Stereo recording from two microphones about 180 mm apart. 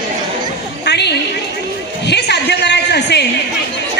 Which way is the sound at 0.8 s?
70° left (ahead or behind).